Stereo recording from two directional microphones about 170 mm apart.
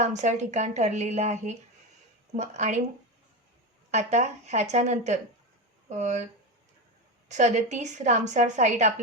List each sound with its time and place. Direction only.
0.0 s a woman's voice: 45° right (ahead or behind)
3.9 s a woman's voice: 40° right (ahead or behind)
7.3 s a woman's voice: 45° right (ahead or behind)